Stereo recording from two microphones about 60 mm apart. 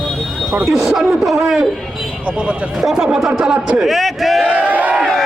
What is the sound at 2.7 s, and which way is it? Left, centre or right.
A man's voice, centre.